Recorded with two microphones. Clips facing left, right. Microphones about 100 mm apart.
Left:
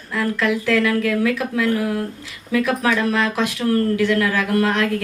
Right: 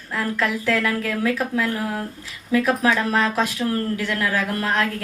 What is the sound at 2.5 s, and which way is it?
Speech, 40° right (ahead or behind).